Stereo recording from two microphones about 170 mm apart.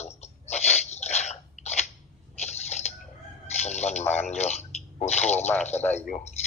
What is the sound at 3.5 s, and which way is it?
Speech, 40° left (ahead or behind).